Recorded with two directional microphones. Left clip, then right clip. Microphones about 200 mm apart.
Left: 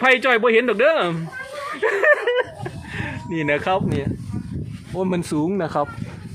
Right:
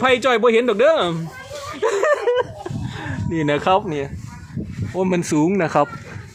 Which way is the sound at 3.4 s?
20° right (ahead or behind).